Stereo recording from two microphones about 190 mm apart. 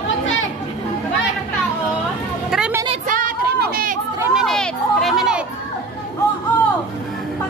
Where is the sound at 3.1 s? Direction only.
45° right (ahead or behind).